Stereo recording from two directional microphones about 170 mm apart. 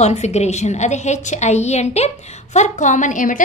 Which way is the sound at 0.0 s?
40° left (ahead or behind).